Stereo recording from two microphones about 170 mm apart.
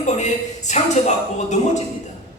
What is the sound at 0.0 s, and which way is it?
Speech, 45° left (ahead or behind).